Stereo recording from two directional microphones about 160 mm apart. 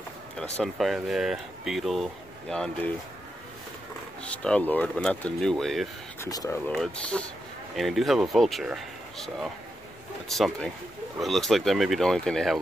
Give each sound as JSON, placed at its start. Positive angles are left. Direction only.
{"t": 0.6, "sound": "speech", "side_deg": 0}
{"t": 4.2, "sound": "speech", "side_deg": 5}
{"t": 6.3, "sound": "speech", "side_deg": 20}
{"t": 6.7, "sound": "speech", "side_deg": 5}